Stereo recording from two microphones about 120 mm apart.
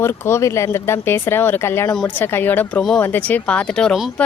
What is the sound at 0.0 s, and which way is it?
Speech, 20° left (ahead or behind).